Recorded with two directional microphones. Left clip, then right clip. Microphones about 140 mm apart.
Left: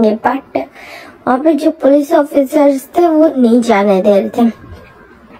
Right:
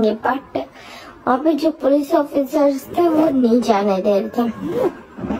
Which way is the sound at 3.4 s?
35° left (ahead or behind).